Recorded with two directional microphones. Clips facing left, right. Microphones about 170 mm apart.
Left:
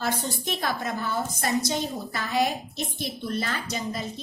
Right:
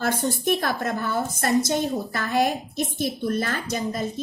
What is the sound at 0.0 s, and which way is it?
A woman's voice, 55° right (ahead or behind).